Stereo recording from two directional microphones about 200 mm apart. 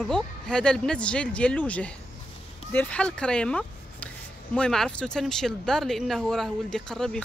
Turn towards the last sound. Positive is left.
turn(degrees=5)  # may be behind; listen again after turning